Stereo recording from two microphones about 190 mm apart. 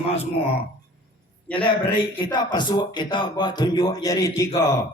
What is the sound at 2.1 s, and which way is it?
A man's voice, 25° left (ahead or behind).